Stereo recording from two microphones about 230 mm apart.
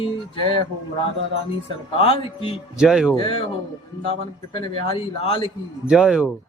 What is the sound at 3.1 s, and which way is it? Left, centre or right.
Speech, left.